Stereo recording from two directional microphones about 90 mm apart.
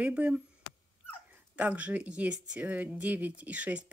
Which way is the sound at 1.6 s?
15° right (ahead or behind).